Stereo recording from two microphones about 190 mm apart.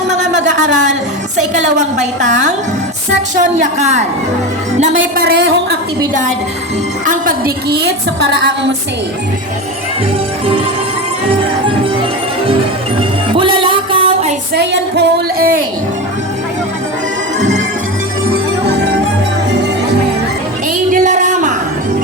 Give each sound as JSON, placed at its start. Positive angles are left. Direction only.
{"t": 0.1, "sound": "a sound", "side_deg": -40}
{"t": 1.5, "sound": "a woman's voice", "side_deg": -40}
{"t": 5.2, "sound": "a woman's voice", "side_deg": -60}
{"t": 7.0, "sound": "a woman's voice", "side_deg": -45}
{"t": 13.3, "sound": "music", "side_deg": -30}
{"t": 14.5, "sound": "a woman's voice", "side_deg": -60}
{"t": 20.9, "sound": "a sound", "side_deg": -40}